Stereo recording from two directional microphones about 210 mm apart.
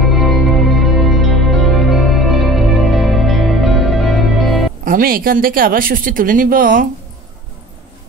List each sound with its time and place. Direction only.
0.1 s music: centre (ahead or behind)
4.8 s speech: 40° right (ahead or behind)